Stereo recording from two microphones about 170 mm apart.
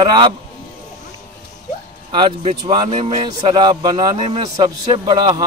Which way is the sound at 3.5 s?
25° right (ahead or behind).